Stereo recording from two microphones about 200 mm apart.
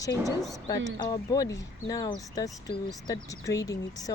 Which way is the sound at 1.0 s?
20° left (ahead or behind).